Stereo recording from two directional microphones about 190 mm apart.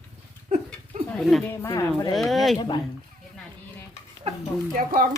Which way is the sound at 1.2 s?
Centre (ahead or behind).